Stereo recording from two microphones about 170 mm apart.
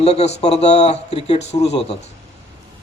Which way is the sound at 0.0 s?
40° left (ahead or behind).